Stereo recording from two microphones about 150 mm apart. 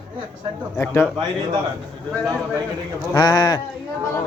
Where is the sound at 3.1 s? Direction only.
25° left (ahead or behind).